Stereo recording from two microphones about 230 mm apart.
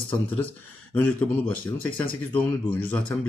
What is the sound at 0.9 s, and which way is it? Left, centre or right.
Speech, centre.